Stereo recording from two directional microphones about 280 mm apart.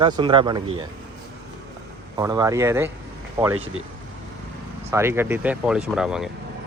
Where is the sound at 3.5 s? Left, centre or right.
Right.